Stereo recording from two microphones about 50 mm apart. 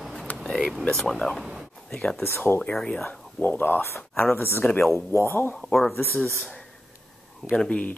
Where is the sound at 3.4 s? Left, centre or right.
Left.